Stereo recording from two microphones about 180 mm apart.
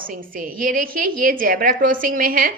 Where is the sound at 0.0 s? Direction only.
50° right (ahead or behind).